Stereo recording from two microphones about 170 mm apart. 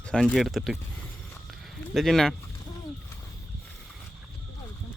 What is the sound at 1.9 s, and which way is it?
Speech, centre (ahead or behind).